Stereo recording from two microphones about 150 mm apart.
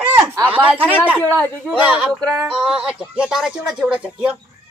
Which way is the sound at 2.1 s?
5° left (ahead or behind).